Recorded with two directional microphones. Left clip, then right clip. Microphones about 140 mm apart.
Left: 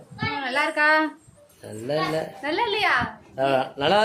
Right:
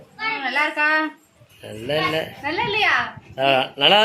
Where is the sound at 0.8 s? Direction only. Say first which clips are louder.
Left 1 dB; 30° left (ahead or behind).